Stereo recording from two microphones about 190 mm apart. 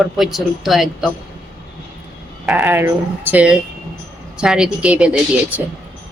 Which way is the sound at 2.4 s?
10° right (ahead or behind).